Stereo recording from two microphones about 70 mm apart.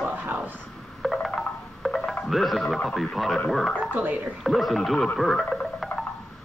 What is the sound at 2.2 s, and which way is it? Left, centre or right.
Speech, centre.